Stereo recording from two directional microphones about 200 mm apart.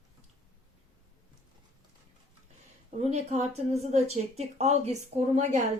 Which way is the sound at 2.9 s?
35° right (ahead or behind).